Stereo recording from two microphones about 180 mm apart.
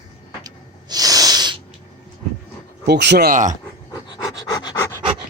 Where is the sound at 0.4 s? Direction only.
20° right (ahead or behind).